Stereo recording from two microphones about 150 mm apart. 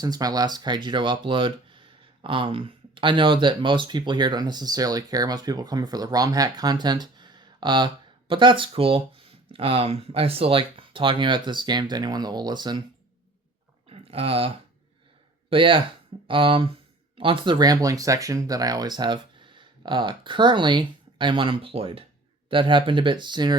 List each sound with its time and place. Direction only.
0.0 s speech: 25° right (ahead or behind)
13.9 s a sound: 40° right (ahead or behind)
15.4 s speech: 35° right (ahead or behind)